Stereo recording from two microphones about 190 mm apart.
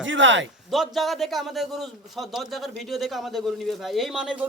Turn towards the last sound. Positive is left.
turn(degrees=0)  # may be behind; listen again after turning